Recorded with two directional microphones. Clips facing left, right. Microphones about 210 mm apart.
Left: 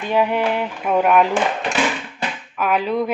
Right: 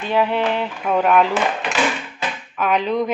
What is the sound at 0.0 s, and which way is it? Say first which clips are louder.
Speech: even; 10° left (ahead or behind).